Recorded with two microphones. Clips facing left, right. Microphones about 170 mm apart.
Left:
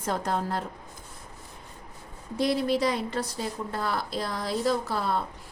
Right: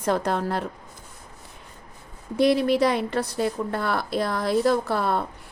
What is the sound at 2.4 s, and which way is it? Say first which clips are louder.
Speech: right 6 dB; 65° right (ahead or behind).